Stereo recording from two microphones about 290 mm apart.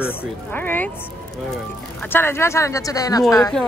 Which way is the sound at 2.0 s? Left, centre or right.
Centre.